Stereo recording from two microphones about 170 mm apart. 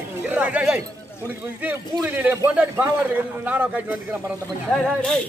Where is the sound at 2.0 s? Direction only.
10° right (ahead or behind).